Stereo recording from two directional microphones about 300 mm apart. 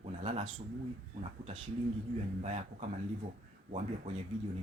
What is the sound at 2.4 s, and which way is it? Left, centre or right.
Speech, right.